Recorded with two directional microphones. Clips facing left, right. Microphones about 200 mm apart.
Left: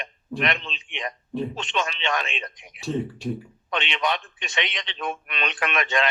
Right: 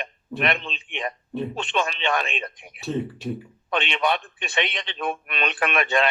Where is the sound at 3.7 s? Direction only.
55° right (ahead or behind).